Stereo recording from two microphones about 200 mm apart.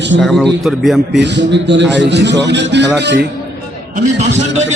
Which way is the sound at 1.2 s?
60° right (ahead or behind).